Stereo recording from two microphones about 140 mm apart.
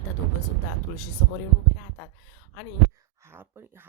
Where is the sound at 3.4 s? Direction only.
20° right (ahead or behind).